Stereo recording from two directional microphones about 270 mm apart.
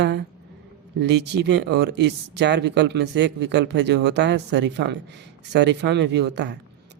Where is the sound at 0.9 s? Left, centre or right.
Right.